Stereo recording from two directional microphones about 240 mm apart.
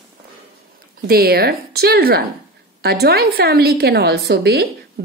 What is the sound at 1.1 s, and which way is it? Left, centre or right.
A woman's voice, right.